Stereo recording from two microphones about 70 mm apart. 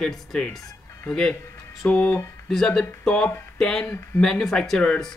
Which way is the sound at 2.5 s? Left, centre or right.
Centre.